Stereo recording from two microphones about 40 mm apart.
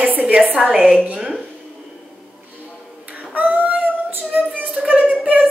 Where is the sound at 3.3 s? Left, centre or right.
Right.